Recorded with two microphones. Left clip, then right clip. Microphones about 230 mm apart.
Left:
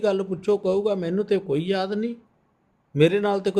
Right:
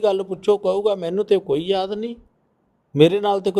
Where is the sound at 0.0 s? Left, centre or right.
Centre.